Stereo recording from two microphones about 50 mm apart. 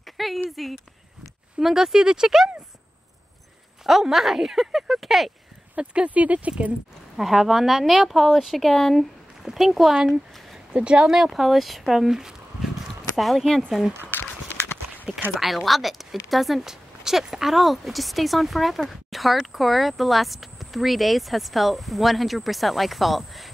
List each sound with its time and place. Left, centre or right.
0.0 s a sound: centre
0.5 s speech: centre
3.8 s speech: centre
5.8 s speech: right
7.2 s speech: centre
10.7 s speech: centre
11.1 s speech: centre
13.5 s speech: centre
14.1 s clip-clop: left
15.4 s speech: centre